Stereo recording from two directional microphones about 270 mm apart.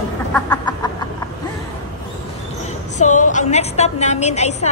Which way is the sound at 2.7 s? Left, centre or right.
Left.